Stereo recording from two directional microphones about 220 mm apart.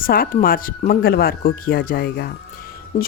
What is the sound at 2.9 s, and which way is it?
Speech, 30° left (ahead or behind).